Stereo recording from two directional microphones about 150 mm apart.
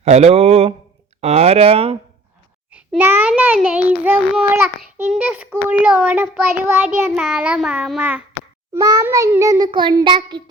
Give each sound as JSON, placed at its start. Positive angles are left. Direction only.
{"t": 0.0, "sound": "speech", "side_deg": -45}
{"t": 2.7, "sound": "a child's voice", "side_deg": -10}
{"t": 8.7, "sound": "child singing", "side_deg": -25}